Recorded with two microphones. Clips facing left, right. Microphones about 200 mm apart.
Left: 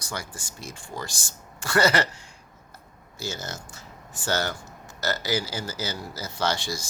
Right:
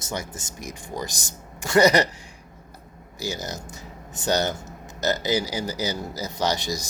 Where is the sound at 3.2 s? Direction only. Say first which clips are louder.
Right 3 dB; 15° right (ahead or behind).